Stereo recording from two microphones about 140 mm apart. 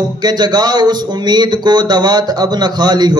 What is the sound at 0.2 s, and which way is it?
Speech, 30° right (ahead or behind).